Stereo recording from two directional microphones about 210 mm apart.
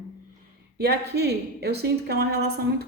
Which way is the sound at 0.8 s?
50° right (ahead or behind).